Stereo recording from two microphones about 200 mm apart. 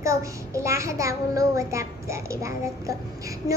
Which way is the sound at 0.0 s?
15° right (ahead or behind).